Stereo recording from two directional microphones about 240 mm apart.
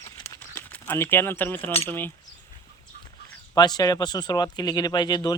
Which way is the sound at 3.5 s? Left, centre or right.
Centre.